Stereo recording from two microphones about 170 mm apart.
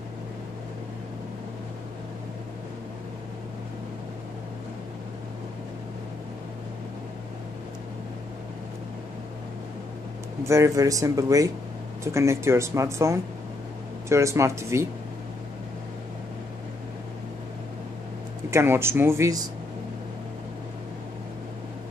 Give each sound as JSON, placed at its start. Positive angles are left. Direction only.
{"t": 10.4, "sound": "speech", "side_deg": -15}
{"t": 18.5, "sound": "speech", "side_deg": -15}